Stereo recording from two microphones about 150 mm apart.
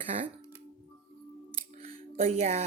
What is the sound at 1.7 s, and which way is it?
Music, 25° left (ahead or behind).